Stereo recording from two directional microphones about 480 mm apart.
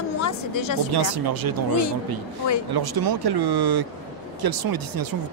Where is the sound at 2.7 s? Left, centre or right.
Right.